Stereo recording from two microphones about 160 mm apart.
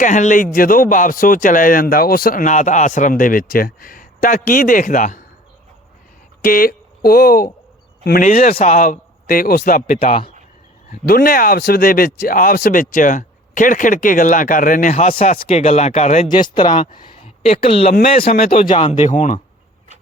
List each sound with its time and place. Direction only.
0.0 s a man's voice: 50° left (ahead or behind)
6.4 s a man's voice: 65° left (ahead or behind)
8.5 s a man's voice: 50° left (ahead or behind)
15.4 s speech: 40° left (ahead or behind)
16.3 s speech: 30° left (ahead or behind)
16.8 s speech: 45° left (ahead or behind)
18.2 s a man's voice: 65° left (ahead or behind)
18.8 s speech: 45° left (ahead or behind)